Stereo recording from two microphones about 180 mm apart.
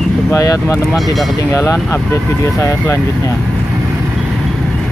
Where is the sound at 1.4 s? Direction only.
15° left (ahead or behind).